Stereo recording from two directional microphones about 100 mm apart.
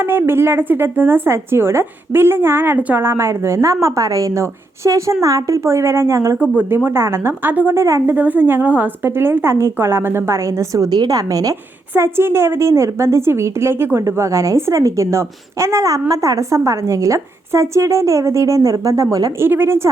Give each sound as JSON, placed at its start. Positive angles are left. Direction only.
{"t": 0.0, "sound": "speech", "side_deg": -25}
{"t": 8.1, "sound": "speech", "side_deg": -15}
{"t": 10.9, "sound": "speech", "side_deg": -40}
{"t": 11.9, "sound": "speech", "side_deg": -25}
{"t": 19.4, "sound": "speech", "side_deg": -20}